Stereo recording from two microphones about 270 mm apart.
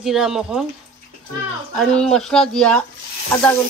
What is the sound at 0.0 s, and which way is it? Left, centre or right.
Speech, centre.